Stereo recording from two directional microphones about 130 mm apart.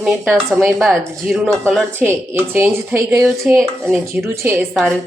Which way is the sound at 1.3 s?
Centre (ahead or behind).